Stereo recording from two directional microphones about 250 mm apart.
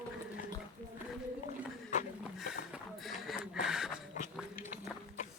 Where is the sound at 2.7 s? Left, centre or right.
Centre.